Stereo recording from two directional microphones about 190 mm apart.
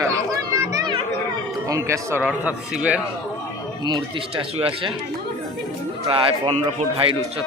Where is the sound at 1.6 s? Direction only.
15° right (ahead or behind).